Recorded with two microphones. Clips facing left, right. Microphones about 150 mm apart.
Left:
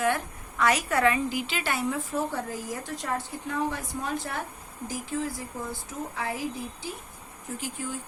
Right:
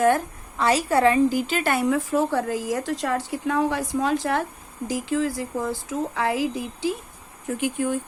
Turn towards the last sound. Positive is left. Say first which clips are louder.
# right 10 dB
turn(degrees=-60)  # may be behind; listen again after turning